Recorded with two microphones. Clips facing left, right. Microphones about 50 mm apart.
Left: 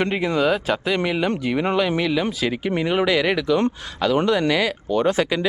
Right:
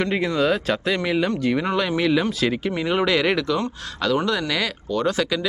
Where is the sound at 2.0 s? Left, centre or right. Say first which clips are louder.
Right 1 dB; centre.